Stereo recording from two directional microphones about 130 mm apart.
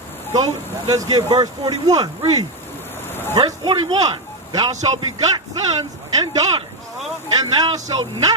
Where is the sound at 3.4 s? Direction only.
35° right (ahead or behind).